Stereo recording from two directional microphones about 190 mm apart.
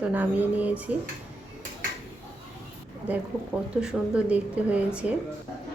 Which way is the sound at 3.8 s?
5° right (ahead or behind).